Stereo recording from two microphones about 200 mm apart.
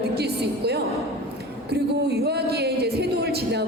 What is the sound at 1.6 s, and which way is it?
Music, 55° right (ahead or behind).